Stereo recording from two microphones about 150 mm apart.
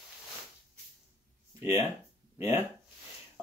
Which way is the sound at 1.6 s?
20° right (ahead or behind).